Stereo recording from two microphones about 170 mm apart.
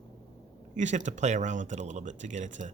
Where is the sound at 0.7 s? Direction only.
45° right (ahead or behind).